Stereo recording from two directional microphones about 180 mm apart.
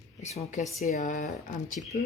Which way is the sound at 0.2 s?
40° left (ahead or behind).